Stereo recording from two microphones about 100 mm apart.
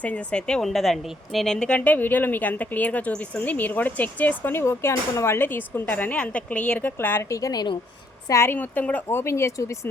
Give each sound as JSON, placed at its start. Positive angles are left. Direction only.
{"t": 0.0, "sound": "a woman's voice", "side_deg": 15}
{"t": 7.3, "sound": "a woman's voice", "side_deg": 35}
{"t": 8.3, "sound": "speech", "side_deg": 25}
{"t": 8.5, "sound": "speech", "side_deg": 15}